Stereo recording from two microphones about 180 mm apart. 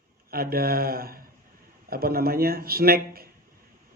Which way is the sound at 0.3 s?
55° right (ahead or behind).